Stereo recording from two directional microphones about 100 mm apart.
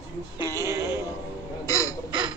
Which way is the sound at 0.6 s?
30° right (ahead or behind).